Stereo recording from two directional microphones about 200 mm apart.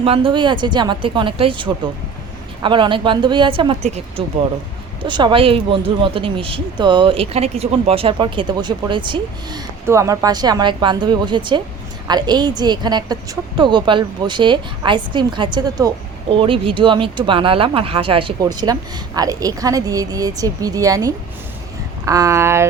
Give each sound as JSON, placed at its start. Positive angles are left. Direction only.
{"t": 0.0, "sound": "speech", "side_deg": -25}
{"t": 5.0, "sound": "speech", "side_deg": -25}